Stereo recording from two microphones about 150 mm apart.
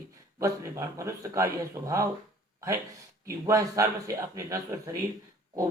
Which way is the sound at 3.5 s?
20° right (ahead or behind).